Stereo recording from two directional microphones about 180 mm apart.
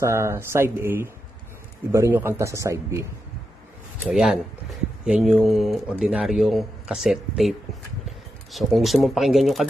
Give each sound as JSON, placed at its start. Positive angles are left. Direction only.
{"t": 0.0, "sound": "a man's voice", "side_deg": -15}
{"t": 4.0, "sound": "speech", "side_deg": -5}